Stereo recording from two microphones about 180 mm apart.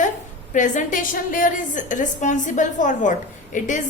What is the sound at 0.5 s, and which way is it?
A woman's voice, 45° left (ahead or behind).